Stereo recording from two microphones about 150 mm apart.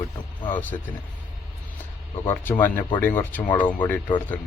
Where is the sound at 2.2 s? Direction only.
15° left (ahead or behind).